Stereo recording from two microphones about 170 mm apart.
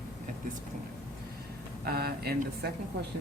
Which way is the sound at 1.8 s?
65° right (ahead or behind).